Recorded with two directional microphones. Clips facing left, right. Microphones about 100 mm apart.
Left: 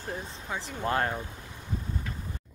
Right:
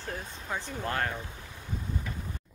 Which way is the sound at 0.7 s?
25° left (ahead or behind).